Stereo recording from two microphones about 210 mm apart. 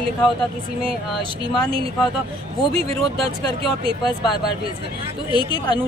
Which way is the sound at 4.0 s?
20° left (ahead or behind).